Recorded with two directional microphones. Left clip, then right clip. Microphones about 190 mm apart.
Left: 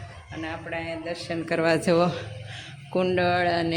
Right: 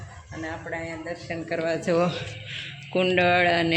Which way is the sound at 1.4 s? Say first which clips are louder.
Left 4 dB; 45° left (ahead or behind).